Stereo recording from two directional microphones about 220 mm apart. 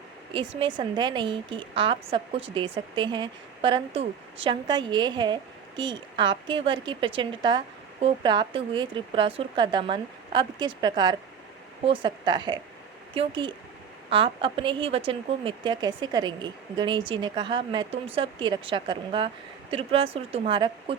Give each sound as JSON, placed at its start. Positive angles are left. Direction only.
{"t": 0.3, "sound": "a woman's voice", "side_deg": -25}